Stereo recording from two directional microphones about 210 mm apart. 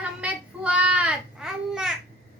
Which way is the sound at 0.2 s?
5° right (ahead or behind).